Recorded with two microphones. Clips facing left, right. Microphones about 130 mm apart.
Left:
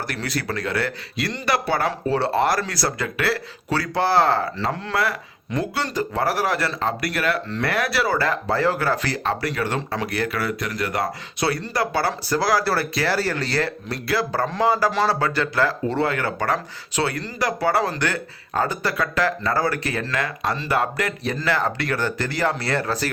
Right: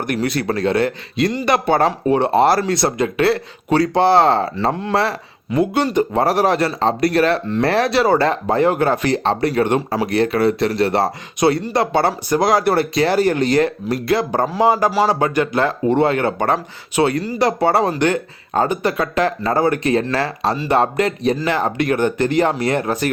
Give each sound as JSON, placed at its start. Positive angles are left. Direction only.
{"t": 0.1, "sound": "speech", "side_deg": -25}
{"t": 11.3, "sound": "speech", "side_deg": -20}